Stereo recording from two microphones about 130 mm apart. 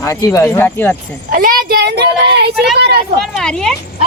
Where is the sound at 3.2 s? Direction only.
5° left (ahead or behind).